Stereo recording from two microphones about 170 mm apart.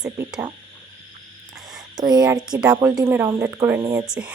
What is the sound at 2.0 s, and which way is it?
Speech, 25° right (ahead or behind).